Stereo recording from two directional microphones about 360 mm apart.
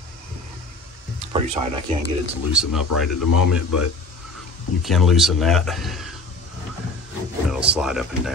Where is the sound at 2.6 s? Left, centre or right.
Centre.